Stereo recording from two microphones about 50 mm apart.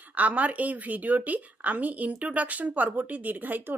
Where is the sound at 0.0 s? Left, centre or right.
Right.